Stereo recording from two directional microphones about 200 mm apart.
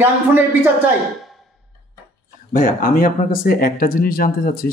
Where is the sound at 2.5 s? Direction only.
45° left (ahead or behind).